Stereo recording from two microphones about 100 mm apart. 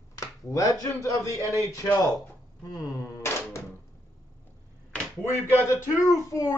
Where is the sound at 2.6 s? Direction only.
40° left (ahead or behind).